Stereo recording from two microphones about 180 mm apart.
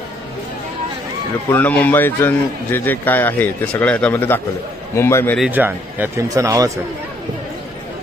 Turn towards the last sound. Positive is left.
turn(degrees=-20)  # may be behind; listen again after turning